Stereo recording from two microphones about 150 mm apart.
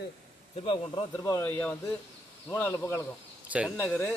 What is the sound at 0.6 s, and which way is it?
Speech, 35° left (ahead or behind).